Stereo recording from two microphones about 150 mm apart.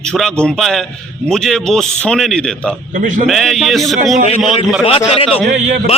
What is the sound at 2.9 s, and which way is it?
Speech, 60° right (ahead or behind).